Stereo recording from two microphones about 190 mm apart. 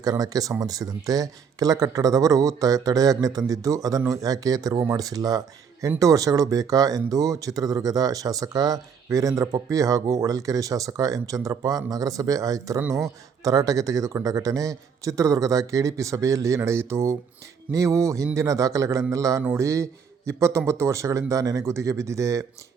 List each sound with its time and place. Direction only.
0.0 s a man's voice: 20° right (ahead or behind)